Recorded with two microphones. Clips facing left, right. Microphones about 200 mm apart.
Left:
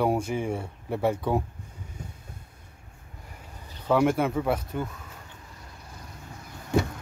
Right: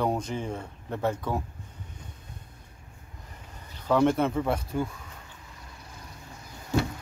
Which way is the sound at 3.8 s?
5° left (ahead or behind).